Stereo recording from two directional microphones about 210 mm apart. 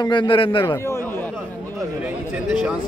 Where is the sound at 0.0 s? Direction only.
20° left (ahead or behind).